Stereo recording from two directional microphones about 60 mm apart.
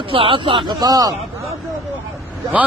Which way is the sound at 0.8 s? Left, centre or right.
Right.